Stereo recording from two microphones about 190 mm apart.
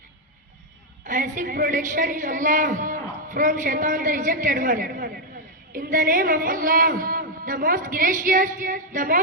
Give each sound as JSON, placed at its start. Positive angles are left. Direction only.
{"t": 1.0, "sound": "a woman's voice", "side_deg": -45}